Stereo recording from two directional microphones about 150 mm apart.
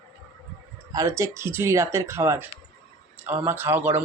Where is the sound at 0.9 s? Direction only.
20° right (ahead or behind).